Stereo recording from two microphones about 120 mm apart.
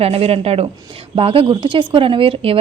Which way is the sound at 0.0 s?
55° right (ahead or behind).